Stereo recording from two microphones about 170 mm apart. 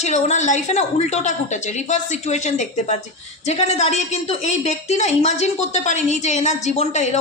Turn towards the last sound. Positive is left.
turn(degrees=40)  # may be behind; listen again after turning